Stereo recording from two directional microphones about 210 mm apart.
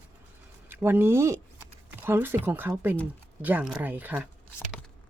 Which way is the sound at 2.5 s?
10° right (ahead or behind).